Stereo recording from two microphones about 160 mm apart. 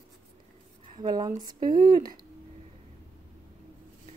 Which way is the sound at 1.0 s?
25° right (ahead or behind).